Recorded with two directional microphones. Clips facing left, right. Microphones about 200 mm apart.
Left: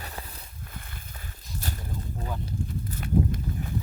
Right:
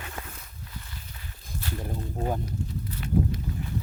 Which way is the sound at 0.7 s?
55° left (ahead or behind).